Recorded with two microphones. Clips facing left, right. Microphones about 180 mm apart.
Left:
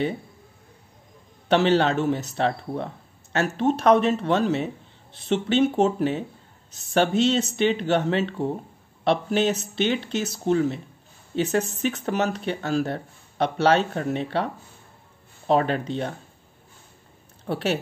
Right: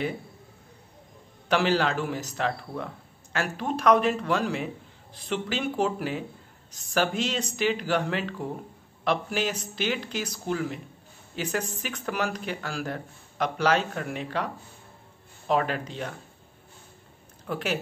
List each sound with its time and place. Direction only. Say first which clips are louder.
1.5 s speech: left 5 dB; 25° left (ahead or behind)
17.5 s speech: left 5 dB; 30° left (ahead or behind)